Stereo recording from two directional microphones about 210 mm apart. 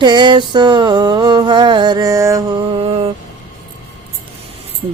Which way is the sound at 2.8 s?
25° right (ahead or behind).